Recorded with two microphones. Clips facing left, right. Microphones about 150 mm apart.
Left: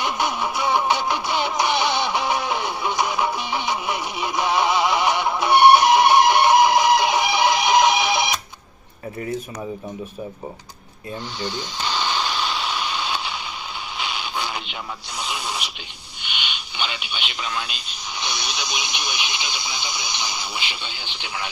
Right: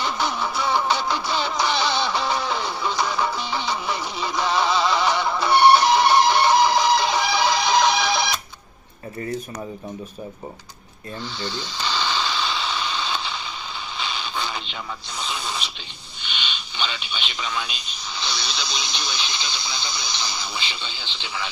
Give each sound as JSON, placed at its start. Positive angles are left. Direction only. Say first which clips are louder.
{"t": 0.0, "sound": "music", "louder": "left 1 dB", "side_deg": 15}
{"t": 11.3, "sound": "a sound", "louder": "left 2 dB", "side_deg": 15}
{"t": 16.2, "sound": "radio", "louder": "left 1 dB", "side_deg": 10}
{"t": 18.2, "sound": "radio", "louder": "left 1 dB", "side_deg": 20}